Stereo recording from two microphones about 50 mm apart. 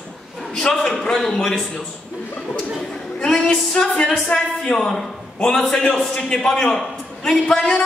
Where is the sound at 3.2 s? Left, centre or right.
Centre.